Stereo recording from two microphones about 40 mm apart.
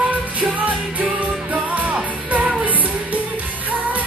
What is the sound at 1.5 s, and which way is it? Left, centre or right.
Music, right.